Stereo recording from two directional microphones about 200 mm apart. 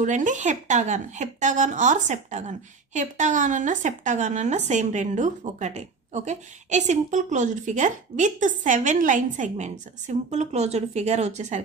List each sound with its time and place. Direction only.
0.0 s a woman's voice: 40° right (ahead or behind)